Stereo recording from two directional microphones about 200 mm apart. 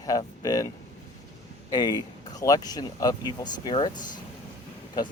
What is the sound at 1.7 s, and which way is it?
Speech, 20° left (ahead or behind).